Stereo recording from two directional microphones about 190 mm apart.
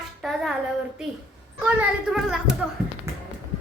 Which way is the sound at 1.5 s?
5° right (ahead or behind).